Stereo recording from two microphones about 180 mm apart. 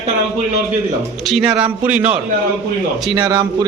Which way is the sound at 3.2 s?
20° right (ahead or behind).